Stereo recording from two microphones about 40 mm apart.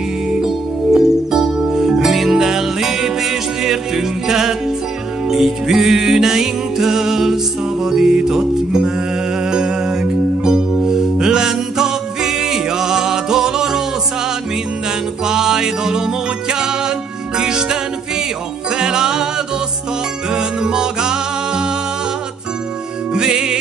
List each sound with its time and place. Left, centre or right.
0.3 s music: centre
15.2 s music: centre
23.1 s music: right